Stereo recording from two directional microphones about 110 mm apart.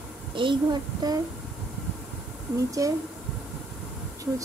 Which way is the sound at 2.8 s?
30° right (ahead or behind).